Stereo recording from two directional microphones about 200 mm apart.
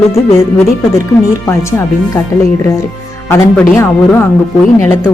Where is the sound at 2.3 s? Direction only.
15° left (ahead or behind).